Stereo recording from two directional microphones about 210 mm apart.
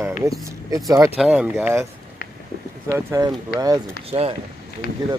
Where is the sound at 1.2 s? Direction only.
5° right (ahead or behind).